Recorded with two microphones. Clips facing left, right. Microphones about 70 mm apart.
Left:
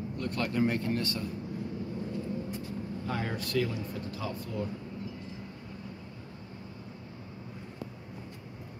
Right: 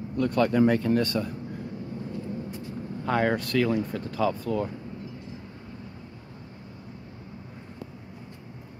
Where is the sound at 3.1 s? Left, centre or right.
Right.